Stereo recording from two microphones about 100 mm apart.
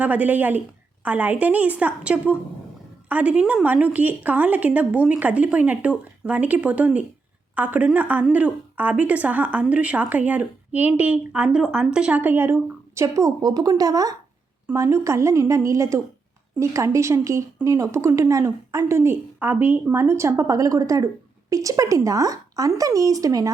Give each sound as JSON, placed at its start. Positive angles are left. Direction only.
{"t": 0.0, "sound": "a woman's voice", "side_deg": -15}